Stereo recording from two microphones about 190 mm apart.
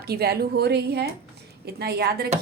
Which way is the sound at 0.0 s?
55° right (ahead or behind).